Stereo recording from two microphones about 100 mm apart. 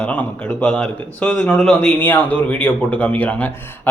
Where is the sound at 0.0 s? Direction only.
15° left (ahead or behind).